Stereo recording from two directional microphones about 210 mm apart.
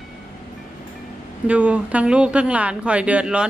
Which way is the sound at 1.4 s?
5° right (ahead or behind).